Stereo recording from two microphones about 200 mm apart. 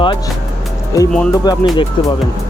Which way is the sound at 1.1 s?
5° left (ahead or behind).